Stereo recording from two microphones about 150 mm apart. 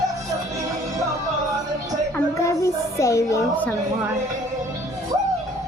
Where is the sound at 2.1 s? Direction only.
20° left (ahead or behind).